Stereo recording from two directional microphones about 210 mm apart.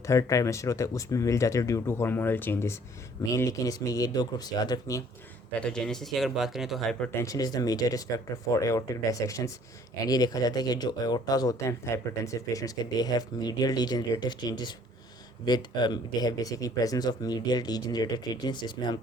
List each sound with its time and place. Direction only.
0.0 s speech: 15° left (ahead or behind)
5.5 s speech: 5° left (ahead or behind)
7.2 s speech: 15° left (ahead or behind)